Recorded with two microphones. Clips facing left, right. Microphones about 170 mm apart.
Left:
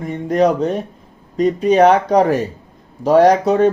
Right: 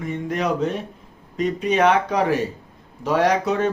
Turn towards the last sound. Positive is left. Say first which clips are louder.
# left 7 dB
turn(degrees=40)  # may be behind; listen again after turning